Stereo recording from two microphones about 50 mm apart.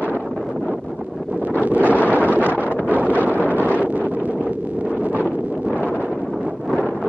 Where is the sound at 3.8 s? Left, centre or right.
Right.